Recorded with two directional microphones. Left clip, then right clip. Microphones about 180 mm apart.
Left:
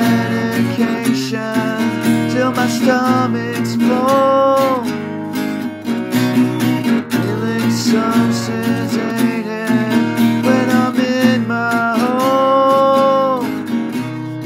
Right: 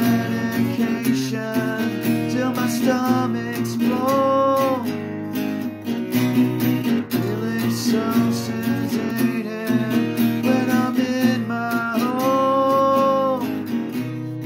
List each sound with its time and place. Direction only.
2.3 s music: 15° left (ahead or behind)
3.8 s music: 25° left (ahead or behind)
6.1 s music: 30° left (ahead or behind)
9.9 s music: 30° left (ahead or behind)
10.5 s music: 15° left (ahead or behind)
11.9 s music: 30° left (ahead or behind)
12.4 s music: 15° left (ahead or behind)